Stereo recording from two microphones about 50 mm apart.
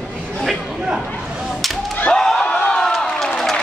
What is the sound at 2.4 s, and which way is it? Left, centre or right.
Crowd, left.